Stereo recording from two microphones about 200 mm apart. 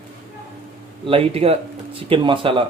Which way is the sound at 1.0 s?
30° right (ahead or behind).